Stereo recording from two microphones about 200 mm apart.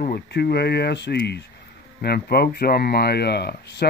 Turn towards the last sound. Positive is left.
turn(degrees=55)  # may be behind; listen again after turning